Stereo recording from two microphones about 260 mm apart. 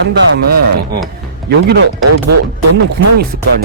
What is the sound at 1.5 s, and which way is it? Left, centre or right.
Speech, right.